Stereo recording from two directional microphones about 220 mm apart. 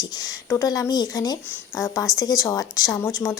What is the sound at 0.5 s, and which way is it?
Speech, 15° left (ahead or behind).